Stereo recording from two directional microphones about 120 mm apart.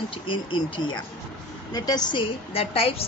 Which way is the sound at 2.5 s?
55° left (ahead or behind).